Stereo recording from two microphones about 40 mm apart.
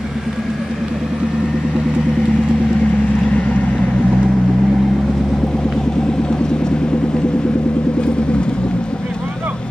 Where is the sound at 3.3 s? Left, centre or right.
Left.